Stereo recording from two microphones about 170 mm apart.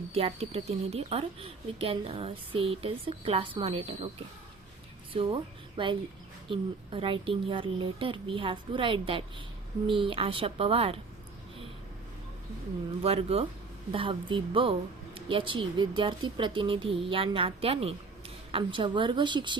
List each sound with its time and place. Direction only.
0.1 s speech: 35° right (ahead or behind)
5.1 s speech: 30° right (ahead or behind)
13.0 s a woman's voice: 35° right (ahead or behind)